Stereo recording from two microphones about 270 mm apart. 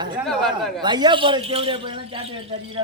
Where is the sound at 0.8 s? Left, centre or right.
Centre.